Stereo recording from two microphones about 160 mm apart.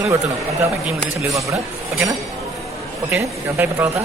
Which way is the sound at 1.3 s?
20° right (ahead or behind).